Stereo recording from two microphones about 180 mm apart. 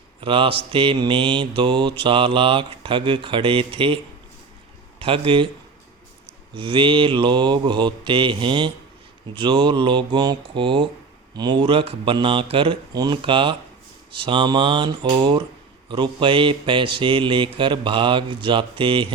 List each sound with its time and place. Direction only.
0.2 s mantra: 30° right (ahead or behind)
4.9 s speech: 30° right (ahead or behind)
6.5 s mantra: 30° right (ahead or behind)